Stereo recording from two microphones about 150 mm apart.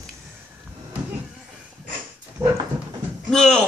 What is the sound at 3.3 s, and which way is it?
Speech, centre (ahead or behind).